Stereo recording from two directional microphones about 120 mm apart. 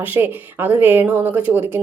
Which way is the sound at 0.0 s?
15° right (ahead or behind).